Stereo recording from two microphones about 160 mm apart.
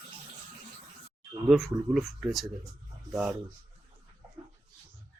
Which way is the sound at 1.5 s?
Centre (ahead or behind).